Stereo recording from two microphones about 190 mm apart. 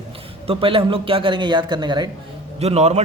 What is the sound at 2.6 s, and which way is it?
Speech, 35° right (ahead or behind).